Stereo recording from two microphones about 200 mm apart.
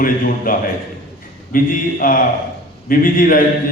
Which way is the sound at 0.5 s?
45° left (ahead or behind).